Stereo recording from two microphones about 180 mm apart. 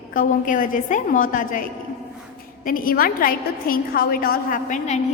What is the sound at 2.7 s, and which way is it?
A woman's voice, 50° left (ahead or behind).